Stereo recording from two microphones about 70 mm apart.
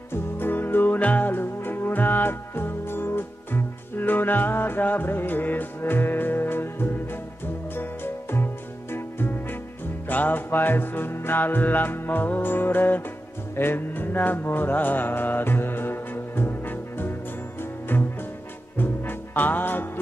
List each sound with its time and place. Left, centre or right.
0.1 s music: left
13.6 s mantra: left
18.8 s music: left